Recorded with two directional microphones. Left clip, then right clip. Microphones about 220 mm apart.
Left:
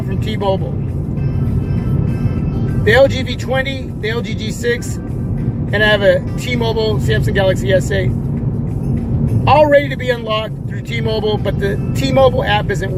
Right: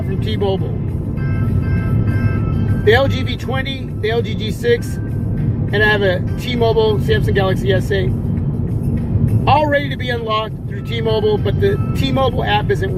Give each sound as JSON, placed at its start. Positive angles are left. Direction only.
{"t": 0.3, "sound": "speech", "side_deg": 20}
{"t": 2.8, "sound": "speech", "side_deg": 20}
{"t": 5.7, "sound": "speech", "side_deg": 20}
{"t": 9.5, "sound": "speech", "side_deg": 20}